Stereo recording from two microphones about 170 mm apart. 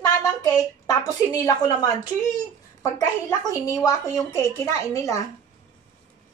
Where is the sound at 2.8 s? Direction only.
20° left (ahead or behind).